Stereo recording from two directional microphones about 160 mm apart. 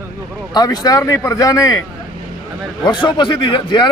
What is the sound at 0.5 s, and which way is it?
Speech, 25° left (ahead or behind).